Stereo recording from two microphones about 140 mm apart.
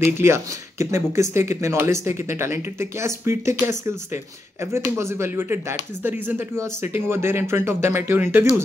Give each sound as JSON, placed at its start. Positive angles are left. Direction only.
{"t": 0.0, "sound": "speech", "side_deg": -20}